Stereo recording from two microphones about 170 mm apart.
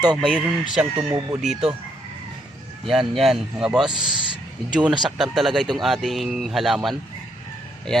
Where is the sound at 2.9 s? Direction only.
Centre (ahead or behind).